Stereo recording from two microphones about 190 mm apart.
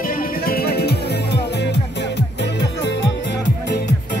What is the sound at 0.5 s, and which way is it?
Music, 55° left (ahead or behind).